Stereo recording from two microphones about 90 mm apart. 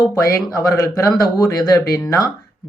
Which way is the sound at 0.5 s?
35° left (ahead or behind).